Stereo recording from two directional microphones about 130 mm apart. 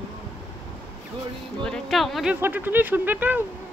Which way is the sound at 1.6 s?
5° left (ahead or behind).